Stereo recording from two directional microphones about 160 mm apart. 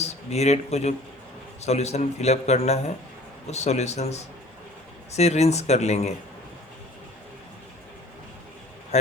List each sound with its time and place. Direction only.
0.0 s a man's voice: 45° left (ahead or behind)